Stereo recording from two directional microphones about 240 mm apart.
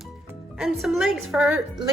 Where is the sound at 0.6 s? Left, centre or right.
Centre.